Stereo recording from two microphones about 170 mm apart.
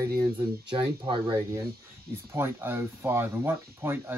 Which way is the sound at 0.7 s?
30° right (ahead or behind).